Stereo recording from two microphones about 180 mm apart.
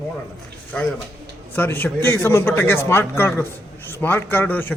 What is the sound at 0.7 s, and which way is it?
A man's voice, 5° left (ahead or behind).